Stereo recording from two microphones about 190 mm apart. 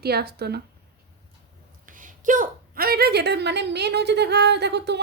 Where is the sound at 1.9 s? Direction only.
45° right (ahead or behind).